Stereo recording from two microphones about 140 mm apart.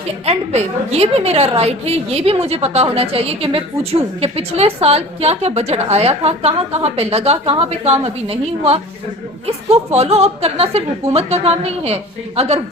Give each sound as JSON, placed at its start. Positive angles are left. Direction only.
{"t": 0.3, "sound": "a woman's voice", "side_deg": -50}